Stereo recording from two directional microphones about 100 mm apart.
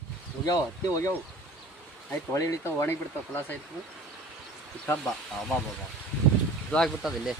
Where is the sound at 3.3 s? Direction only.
20° left (ahead or behind).